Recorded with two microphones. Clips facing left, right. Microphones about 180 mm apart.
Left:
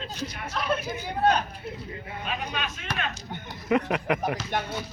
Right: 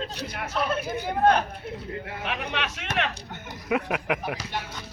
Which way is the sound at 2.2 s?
70° right (ahead or behind).